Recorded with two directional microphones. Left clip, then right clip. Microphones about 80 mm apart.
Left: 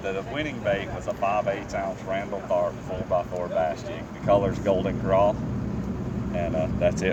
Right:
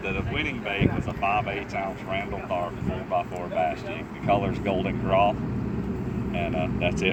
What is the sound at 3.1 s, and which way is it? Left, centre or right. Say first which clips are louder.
Speech: left 2 dB; left.